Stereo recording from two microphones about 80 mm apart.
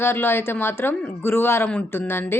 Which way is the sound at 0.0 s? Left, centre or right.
Left.